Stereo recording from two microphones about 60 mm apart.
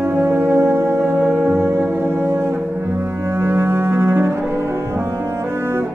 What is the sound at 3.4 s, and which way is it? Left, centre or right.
Double bass, right.